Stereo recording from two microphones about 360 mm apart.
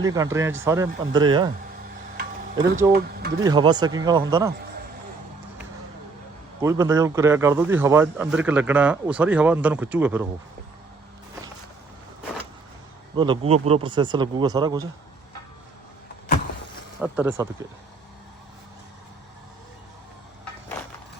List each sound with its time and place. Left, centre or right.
0.0 s a man's voice: centre
2.9 s speech: right
3.4 s a man's voice: centre
6.6 s a man's voice: centre
13.1 s a man's voice: centre
17.0 s a man's voice: centre